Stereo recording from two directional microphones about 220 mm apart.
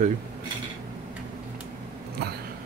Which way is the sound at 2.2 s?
45° right (ahead or behind).